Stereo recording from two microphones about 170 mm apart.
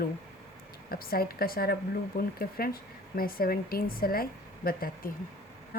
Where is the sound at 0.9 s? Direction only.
60° left (ahead or behind).